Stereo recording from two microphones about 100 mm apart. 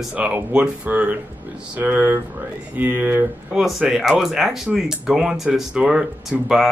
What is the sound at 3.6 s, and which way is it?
Speech, 5° right (ahead or behind).